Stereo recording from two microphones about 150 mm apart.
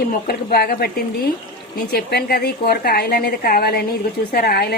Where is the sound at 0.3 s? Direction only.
90° left.